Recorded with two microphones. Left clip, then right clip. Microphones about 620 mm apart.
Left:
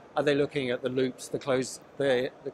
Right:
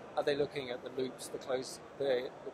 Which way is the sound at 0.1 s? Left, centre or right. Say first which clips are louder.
Left 7 dB; left.